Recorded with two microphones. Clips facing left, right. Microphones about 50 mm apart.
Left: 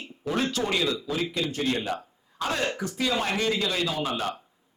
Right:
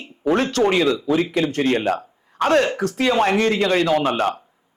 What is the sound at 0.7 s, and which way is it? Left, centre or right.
A man's voice, right.